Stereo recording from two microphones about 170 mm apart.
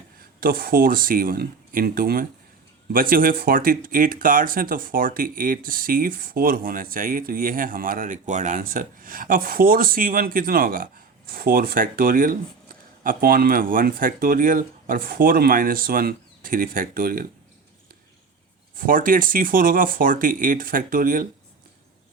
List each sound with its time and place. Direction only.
0.2 s speech: 60° right (ahead or behind)
18.8 s speech: 55° right (ahead or behind)